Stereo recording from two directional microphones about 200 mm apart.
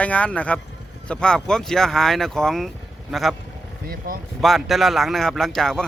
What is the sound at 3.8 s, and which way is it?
Speech, 45° right (ahead or behind).